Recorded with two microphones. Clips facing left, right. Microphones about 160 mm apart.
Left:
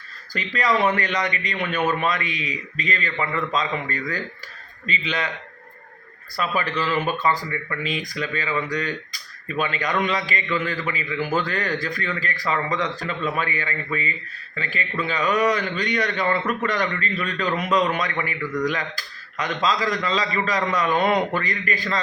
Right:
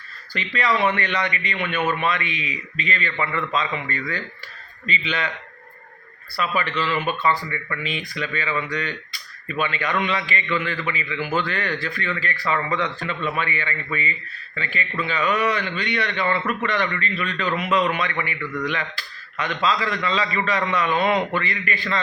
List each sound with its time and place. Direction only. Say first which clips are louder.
0.3 s a man's voice: left 1 dB; 40° left (ahead or behind)
6.3 s a man's voice: even; 40° left (ahead or behind)